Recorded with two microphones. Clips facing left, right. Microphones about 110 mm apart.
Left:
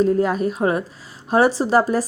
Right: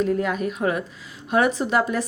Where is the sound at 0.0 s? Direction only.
35° left (ahead or behind).